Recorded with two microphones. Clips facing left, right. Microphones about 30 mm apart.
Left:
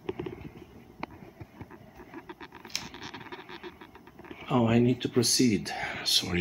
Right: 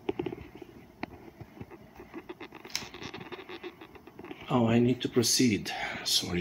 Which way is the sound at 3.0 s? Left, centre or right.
Centre.